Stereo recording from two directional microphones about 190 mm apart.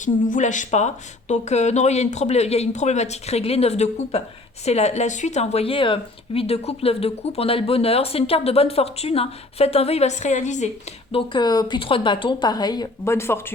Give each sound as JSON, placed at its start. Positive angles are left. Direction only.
{"t": 0.0, "sound": "a woman's voice", "side_deg": 40}
{"t": 11.1, "sound": "a woman's voice", "side_deg": 25}